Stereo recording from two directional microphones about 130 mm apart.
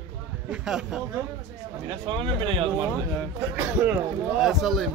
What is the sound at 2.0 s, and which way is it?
Speech, 40° right (ahead or behind).